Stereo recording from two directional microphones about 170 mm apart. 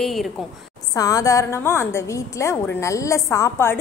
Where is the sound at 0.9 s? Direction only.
20° left (ahead or behind).